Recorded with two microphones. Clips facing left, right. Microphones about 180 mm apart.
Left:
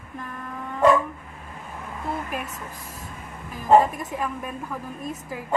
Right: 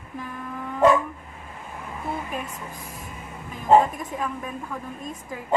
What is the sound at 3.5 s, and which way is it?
A woman's voice, centre (ahead or behind).